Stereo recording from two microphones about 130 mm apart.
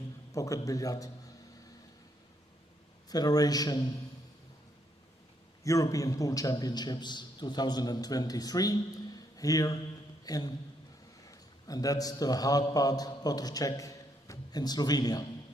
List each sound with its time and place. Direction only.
0.3 s a man's voice: 25° left (ahead or behind)
3.1 s a man's voice: 30° left (ahead or behind)
5.6 s a man's voice: 25° left (ahead or behind)